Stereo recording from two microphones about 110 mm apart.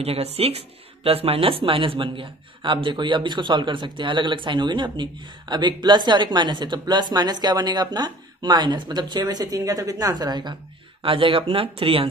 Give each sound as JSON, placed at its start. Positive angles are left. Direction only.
{"t": 0.0, "sound": "speech", "side_deg": -65}